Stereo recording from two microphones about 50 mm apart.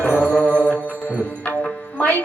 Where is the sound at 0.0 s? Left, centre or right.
Left.